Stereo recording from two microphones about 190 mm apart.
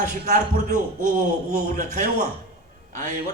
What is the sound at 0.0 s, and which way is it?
A man's voice, 40° right (ahead or behind).